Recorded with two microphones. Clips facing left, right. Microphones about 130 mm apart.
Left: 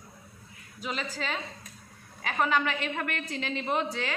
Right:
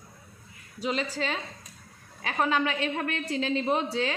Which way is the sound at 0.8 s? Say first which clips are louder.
Right 5 dB; 35° right (ahead or behind).